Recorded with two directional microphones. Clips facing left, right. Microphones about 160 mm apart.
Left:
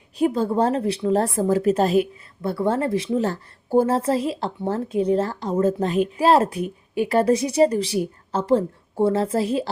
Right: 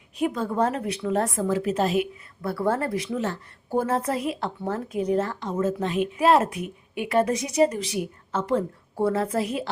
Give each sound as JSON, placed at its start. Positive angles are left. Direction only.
{"t": 0.2, "sound": "a woman's voice", "side_deg": 30}
{"t": 2.4, "sound": "a woman's voice", "side_deg": 25}